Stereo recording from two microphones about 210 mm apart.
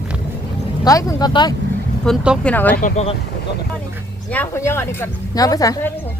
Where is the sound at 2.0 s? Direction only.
Centre (ahead or behind).